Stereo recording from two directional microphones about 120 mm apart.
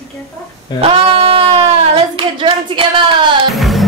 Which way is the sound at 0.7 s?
55° right (ahead or behind).